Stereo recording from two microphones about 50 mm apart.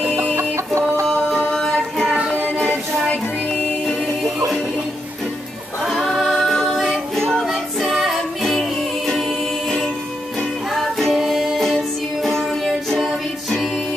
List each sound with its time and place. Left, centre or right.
0.0 s music: right
3.8 s music: centre
5.9 s music: centre
7.9 s music: centre
10.7 s music: centre